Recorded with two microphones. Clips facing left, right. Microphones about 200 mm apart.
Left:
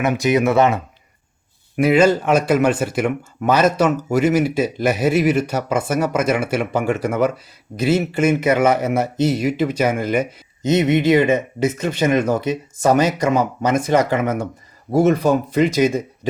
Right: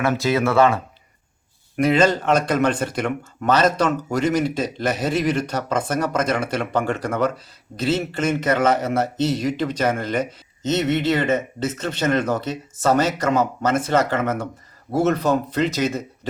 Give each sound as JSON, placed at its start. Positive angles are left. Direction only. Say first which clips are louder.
{"t": 0.0, "sound": "a man's voice", "louder": "left 3 dB", "side_deg": 15}
{"t": 1.7, "sound": "a man's voice", "louder": "left 3 dB", "side_deg": 10}